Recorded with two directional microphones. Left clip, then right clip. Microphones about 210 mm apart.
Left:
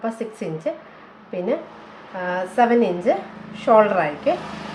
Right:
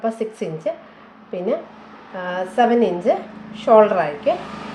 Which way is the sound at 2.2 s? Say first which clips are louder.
Right 1 dB; 20° right (ahead or behind).